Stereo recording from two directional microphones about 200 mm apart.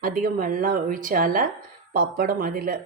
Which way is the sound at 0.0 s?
45° right (ahead or behind).